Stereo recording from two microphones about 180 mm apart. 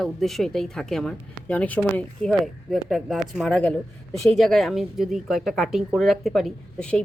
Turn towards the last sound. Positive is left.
turn(degrees=5)  # may be behind; listen again after turning